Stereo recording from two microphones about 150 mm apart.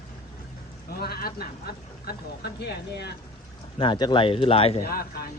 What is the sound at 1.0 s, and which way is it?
Speech, 90° left.